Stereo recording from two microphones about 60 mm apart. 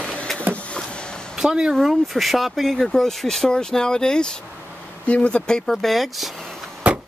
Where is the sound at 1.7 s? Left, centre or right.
Centre.